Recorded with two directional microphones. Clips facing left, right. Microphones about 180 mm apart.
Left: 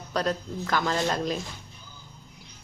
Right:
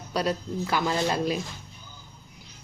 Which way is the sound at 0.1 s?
10° right (ahead or behind).